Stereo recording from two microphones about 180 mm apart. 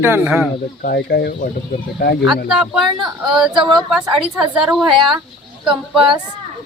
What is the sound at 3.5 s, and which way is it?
Speech, 25° right (ahead or behind).